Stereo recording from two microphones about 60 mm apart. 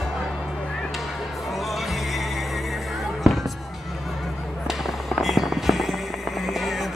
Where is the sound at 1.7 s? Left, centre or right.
Centre.